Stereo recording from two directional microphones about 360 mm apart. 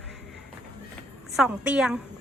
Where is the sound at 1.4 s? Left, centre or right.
Centre.